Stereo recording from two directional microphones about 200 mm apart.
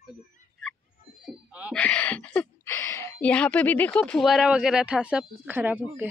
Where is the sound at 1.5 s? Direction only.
5° right (ahead or behind).